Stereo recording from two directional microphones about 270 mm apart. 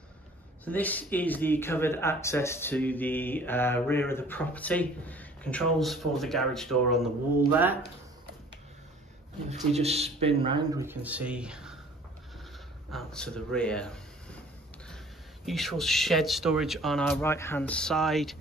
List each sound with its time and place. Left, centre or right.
0.7 s speech: centre
9.5 s speech: right; by 11.8 s centre
12.9 s speech: centre
15.4 s speech: centre